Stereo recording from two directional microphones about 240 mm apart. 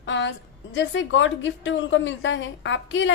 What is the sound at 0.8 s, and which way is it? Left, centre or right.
A woman's voice, left.